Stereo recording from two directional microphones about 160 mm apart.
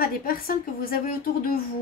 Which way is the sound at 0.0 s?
65° left (ahead or behind).